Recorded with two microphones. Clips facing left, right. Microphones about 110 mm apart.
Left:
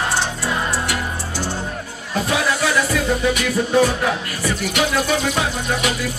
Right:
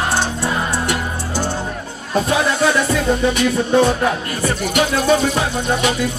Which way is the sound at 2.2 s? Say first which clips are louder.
Right 3 dB; 25° right (ahead or behind).